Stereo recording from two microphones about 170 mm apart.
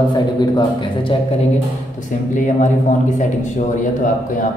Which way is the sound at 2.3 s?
45° left (ahead or behind).